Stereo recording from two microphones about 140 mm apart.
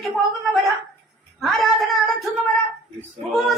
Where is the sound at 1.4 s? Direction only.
Centre (ahead or behind).